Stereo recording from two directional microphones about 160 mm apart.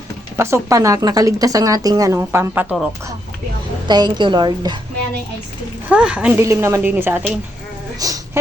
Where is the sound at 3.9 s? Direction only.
25° right (ahead or behind).